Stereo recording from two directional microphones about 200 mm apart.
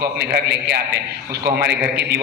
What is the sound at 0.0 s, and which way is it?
A man's voice, 55° right (ahead or behind).